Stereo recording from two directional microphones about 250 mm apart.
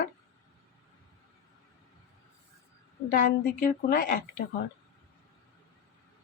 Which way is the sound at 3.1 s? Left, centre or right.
Left.